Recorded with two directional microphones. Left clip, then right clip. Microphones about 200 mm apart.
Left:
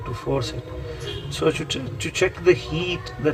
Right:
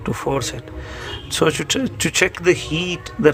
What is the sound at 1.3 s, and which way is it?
Speech, 55° right (ahead or behind).